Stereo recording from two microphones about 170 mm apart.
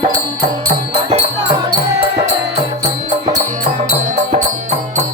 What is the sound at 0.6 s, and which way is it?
Music, 35° right (ahead or behind).